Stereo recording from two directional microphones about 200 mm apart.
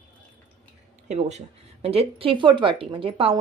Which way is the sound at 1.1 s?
35° right (ahead or behind).